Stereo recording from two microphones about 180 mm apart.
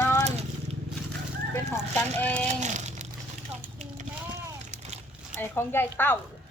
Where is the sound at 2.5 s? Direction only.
40° right (ahead or behind).